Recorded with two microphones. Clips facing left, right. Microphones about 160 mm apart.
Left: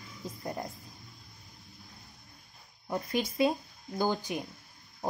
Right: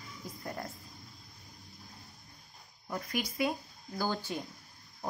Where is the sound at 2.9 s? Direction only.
25° left (ahead or behind).